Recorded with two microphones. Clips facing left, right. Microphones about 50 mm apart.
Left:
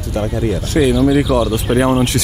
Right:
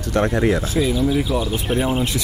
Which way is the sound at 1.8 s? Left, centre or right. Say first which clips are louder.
Left 8 dB; left.